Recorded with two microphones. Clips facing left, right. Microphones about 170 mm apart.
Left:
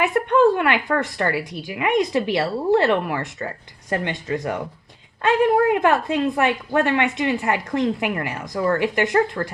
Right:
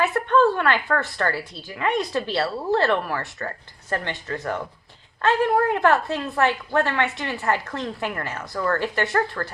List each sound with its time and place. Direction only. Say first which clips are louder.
0.0 s a woman's voice: left 2 dB; 20° left (ahead or behind)